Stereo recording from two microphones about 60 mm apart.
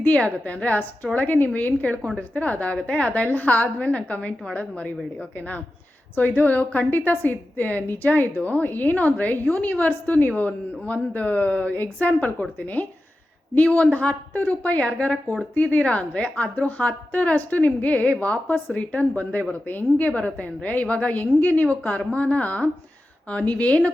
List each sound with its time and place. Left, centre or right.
0.0 s a woman's voice: left
6.1 s a woman's voice: left